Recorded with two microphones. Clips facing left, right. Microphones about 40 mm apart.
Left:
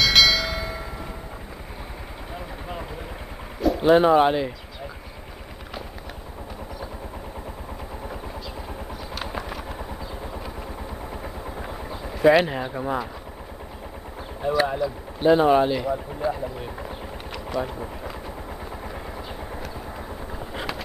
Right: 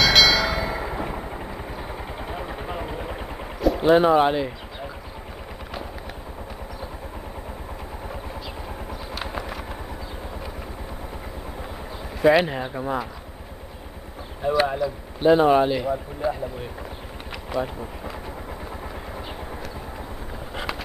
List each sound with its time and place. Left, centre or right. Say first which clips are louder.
0.0 s bell: right 1 dB; centre
0.7 s a sound: right 6 dB; right
2.3 s vehicle: right 2 dB; centre
3.6 s speech: even; centre
9.1 s a sound: even; centre
12.2 s speech: left 1 dB; centre
14.7 s speech: even; centre
17.3 s a sound: right 1 dB; centre
19.1 s vehicle: even; centre